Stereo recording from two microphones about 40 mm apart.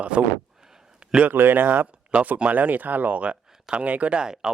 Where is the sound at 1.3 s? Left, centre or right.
Right.